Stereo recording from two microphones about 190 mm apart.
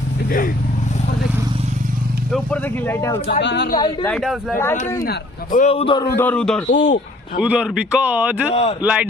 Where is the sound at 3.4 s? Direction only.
65° left (ahead or behind).